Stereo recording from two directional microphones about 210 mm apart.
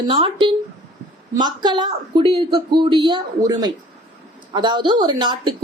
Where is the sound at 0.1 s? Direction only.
25° right (ahead or behind).